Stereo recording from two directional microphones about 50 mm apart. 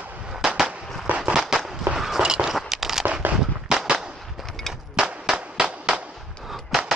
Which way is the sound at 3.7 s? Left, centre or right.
Centre.